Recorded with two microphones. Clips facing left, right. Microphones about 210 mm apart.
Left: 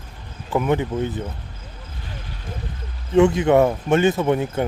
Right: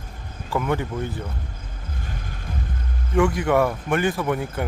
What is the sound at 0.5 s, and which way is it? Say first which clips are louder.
Speech: left 4 dB; 20° left (ahead or behind).